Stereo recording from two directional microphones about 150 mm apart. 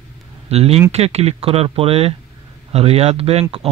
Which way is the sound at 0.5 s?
45° right (ahead or behind).